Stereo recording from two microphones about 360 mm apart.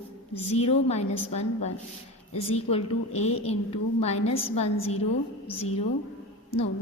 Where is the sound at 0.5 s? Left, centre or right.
Centre.